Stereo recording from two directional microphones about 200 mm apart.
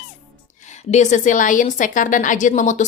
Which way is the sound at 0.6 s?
35° left (ahead or behind).